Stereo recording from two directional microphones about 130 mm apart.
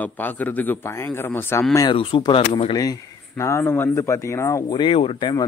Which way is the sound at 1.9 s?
45° left (ahead or behind).